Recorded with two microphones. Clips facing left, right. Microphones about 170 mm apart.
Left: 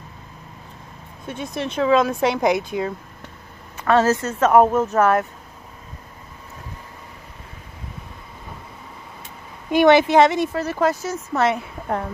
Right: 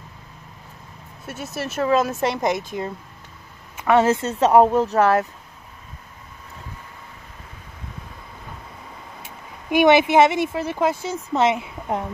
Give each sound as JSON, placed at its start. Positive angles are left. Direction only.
{"t": 1.2, "sound": "speech", "side_deg": -5}
{"t": 3.8, "sound": "speech", "side_deg": -15}
{"t": 4.4, "sound": "speech", "side_deg": -30}
{"t": 9.7, "sound": "speech", "side_deg": -10}